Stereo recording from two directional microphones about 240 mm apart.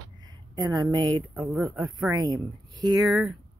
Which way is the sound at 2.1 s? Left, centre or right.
Centre.